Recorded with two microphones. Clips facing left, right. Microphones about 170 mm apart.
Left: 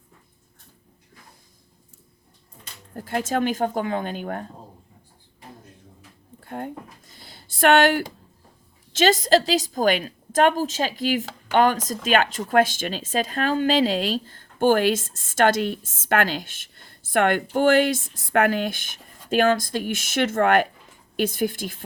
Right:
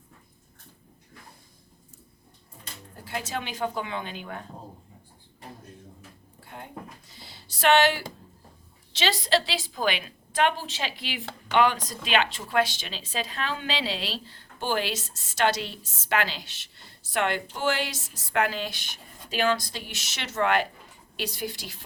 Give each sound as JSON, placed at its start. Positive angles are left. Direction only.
{"t": 2.9, "sound": "a woman's voice", "side_deg": 50}
{"t": 6.4, "sound": "a sound", "side_deg": 50}
{"t": 8.9, "sound": "a woman's voice", "side_deg": 45}